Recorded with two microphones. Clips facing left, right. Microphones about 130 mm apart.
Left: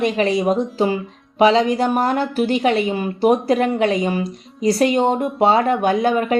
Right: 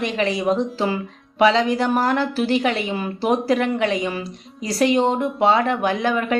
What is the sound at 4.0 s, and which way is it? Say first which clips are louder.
Speech: left 5 dB; 50° left (ahead or behind).